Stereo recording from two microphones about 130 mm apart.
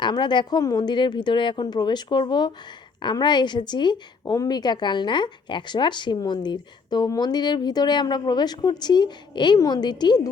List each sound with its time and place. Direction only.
0.0 s a woman's voice: 35° left (ahead or behind)